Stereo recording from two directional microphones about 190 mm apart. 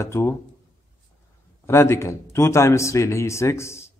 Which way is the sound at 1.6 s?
15° left (ahead or behind).